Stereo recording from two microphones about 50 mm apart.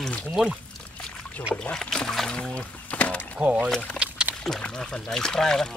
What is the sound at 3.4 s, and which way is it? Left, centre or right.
Speech, right.